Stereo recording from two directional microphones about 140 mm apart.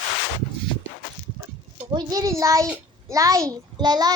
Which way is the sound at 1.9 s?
30° right (ahead or behind).